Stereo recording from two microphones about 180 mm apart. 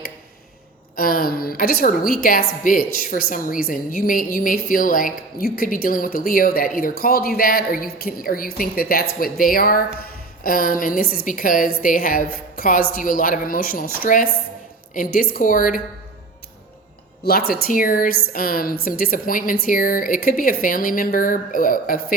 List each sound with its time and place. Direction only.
0.9 s a woman's voice: 55° left (ahead or behind)
17.2 s a woman's voice: 60° left (ahead or behind)